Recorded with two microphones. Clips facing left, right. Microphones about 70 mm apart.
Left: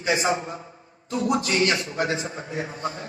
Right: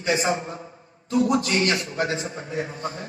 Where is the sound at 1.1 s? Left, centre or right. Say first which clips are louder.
Right 3 dB; left.